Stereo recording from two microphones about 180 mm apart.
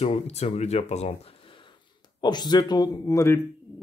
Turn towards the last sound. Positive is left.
turn(degrees=15)  # may be behind; listen again after turning